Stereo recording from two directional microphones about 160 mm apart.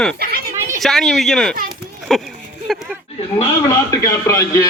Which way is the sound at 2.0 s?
Centre (ahead or behind).